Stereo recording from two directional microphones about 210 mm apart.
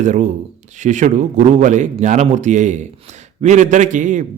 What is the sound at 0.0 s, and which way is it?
A man's voice, 35° right (ahead or behind).